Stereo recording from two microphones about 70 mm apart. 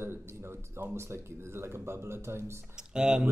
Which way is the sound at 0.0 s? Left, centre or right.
Right.